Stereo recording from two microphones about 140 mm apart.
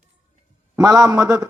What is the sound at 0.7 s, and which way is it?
Speech, 25° right (ahead or behind).